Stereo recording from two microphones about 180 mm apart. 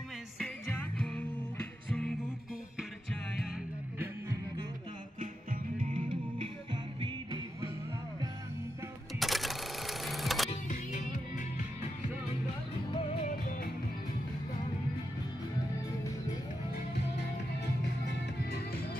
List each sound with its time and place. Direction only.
0.4 s music: 5° left (ahead or behind)
5.2 s music: 50° right (ahead or behind)
6.4 s music: 25° right (ahead or behind)
9.2 s sewing machine: centre (ahead or behind)
10.5 s music: 40° left (ahead or behind)
12.9 s music: 30° left (ahead or behind)